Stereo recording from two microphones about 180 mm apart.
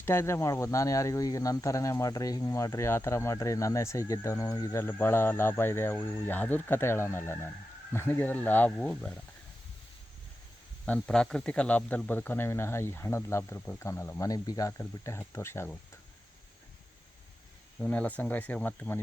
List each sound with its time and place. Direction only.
0.0 s speech: 15° left (ahead or behind)
10.8 s speech: 5° left (ahead or behind)
17.7 s speech: 5° left (ahead or behind)